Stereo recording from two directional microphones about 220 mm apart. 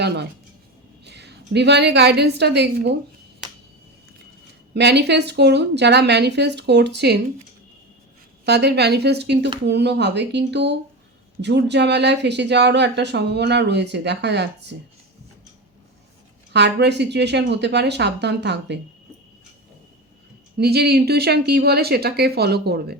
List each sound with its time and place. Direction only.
0.0 s a woman's voice: 50° right (ahead or behind)
4.7 s speech: 50° right (ahead or behind)
8.4 s speech: 50° right (ahead or behind)
16.5 s speech: 50° right (ahead or behind)
20.6 s speech: 45° right (ahead or behind)